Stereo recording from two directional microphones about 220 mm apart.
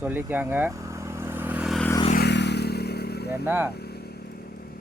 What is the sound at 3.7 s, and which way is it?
Vehicle, 45° left (ahead or behind).